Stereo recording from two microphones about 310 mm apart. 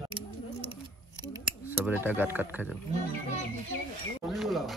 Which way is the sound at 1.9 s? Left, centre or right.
Centre.